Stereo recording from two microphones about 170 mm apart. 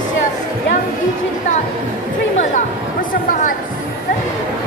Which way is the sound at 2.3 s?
45° left (ahead or behind).